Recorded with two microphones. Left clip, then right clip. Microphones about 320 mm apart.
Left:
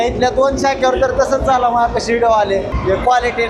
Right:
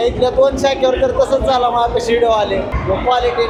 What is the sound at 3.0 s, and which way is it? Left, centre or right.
Speech, left.